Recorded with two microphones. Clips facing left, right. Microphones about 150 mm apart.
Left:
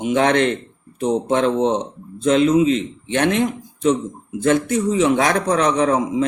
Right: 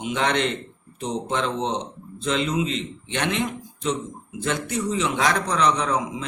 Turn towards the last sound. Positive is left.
turn(degrees=50)  # may be behind; listen again after turning